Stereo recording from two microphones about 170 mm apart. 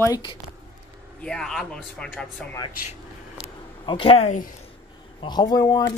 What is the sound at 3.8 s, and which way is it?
Speech, 30° left (ahead or behind).